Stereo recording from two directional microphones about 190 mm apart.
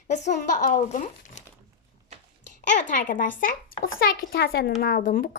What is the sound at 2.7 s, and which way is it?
A woman's voice, 40° left (ahead or behind).